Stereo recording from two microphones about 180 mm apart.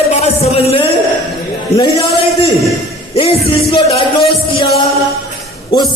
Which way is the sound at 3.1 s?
30° left (ahead or behind).